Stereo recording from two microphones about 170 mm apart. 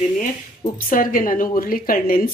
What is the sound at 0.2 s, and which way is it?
A woman's voice, 55° left (ahead or behind).